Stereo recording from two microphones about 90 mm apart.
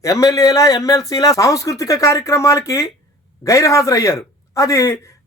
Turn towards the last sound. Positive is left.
turn(degrees=30)  # may be behind; listen again after turning